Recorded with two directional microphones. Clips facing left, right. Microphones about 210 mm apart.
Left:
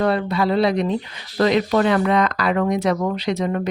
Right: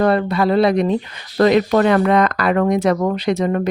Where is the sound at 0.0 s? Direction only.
50° right (ahead or behind).